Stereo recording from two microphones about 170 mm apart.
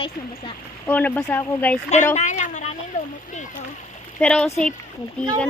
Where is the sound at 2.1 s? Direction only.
45° left (ahead or behind).